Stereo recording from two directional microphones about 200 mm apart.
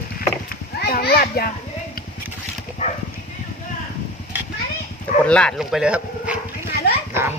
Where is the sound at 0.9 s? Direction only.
50° left (ahead or behind).